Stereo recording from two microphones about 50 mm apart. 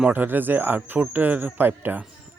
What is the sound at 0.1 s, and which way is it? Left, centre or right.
Speech, right.